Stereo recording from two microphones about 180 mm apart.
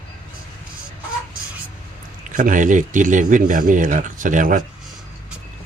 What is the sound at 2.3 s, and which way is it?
Speech, 45° right (ahead or behind).